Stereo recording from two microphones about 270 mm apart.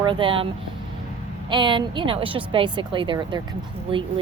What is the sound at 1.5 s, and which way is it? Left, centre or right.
Speech, centre.